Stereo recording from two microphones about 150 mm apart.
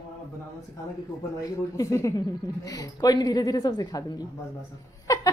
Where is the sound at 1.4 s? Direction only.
20° left (ahead or behind).